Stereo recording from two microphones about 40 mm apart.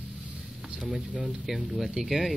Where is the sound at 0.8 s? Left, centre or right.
Centre.